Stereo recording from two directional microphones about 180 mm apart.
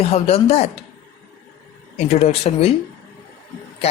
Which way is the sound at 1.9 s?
35° left (ahead or behind).